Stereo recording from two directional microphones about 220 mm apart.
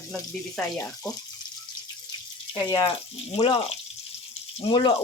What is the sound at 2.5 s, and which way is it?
Speech, 15° left (ahead or behind).